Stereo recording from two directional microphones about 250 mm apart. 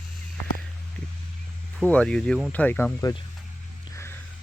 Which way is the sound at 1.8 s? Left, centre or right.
Centre.